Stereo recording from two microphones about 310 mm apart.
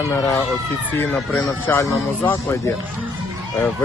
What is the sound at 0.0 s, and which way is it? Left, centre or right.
Speech, centre.